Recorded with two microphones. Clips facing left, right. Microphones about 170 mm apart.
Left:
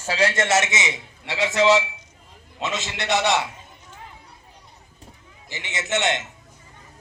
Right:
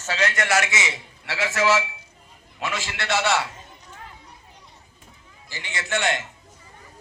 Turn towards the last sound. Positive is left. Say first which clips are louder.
# left 2 dB
turn(degrees=20)  # may be behind; listen again after turning